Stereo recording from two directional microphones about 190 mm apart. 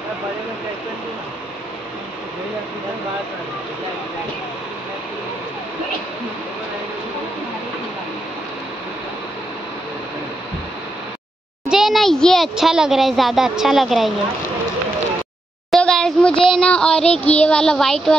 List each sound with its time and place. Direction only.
11.7 s a child's voice: centre (ahead or behind)
15.7 s a sound: 5° left (ahead or behind)
16.4 s a child's voice: 5° left (ahead or behind)
17.0 s child singing: 30° left (ahead or behind)
17.4 s a child's voice: 5° left (ahead or behind)